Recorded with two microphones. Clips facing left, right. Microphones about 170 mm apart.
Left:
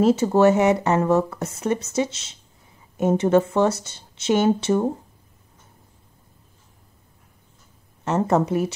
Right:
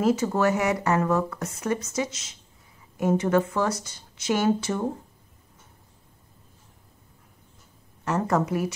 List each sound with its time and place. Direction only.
0.0 s speech: 30° left (ahead or behind)
8.0 s speech: 25° left (ahead or behind)